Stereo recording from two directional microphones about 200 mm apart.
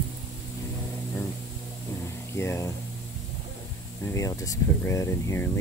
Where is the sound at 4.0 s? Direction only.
15° left (ahead or behind).